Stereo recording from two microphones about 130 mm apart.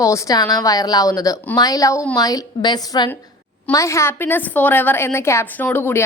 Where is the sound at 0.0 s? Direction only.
25° left (ahead or behind).